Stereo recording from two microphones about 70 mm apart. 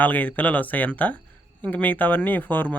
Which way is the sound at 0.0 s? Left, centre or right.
Left.